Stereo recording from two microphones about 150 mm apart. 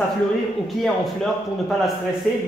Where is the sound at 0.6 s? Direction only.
Centre (ahead or behind).